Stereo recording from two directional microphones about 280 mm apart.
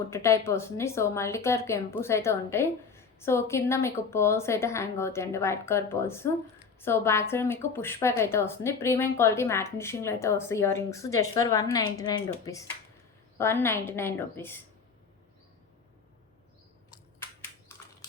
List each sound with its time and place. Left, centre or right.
0.1 s speech: centre